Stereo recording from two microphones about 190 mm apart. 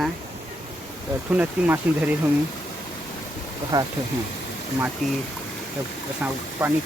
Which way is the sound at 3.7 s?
15° right (ahead or behind).